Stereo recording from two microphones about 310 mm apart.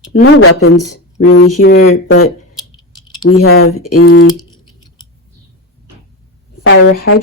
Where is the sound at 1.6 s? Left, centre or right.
Left.